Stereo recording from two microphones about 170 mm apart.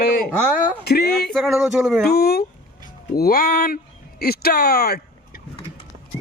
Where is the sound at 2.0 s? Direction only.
65° left (ahead or behind).